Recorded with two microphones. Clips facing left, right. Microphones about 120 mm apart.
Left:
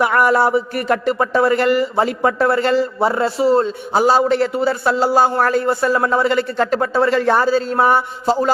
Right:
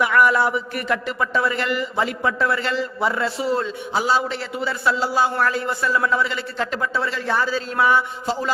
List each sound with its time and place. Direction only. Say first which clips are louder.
0.0 s a man's voice: left 3 dB; 40° left (ahead or behind)